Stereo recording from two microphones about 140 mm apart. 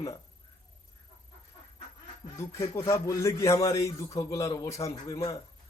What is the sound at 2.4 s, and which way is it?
A man's voice, 20° left (ahead or behind).